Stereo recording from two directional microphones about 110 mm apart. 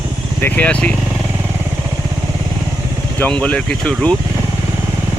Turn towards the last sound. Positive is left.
turn(degrees=5)  # may be behind; listen again after turning